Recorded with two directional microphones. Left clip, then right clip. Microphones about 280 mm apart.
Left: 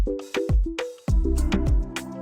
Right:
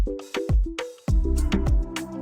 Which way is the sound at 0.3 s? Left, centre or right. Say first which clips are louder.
Left 1 dB; centre.